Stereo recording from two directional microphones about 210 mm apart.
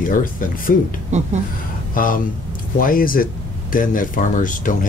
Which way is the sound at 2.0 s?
40° left (ahead or behind).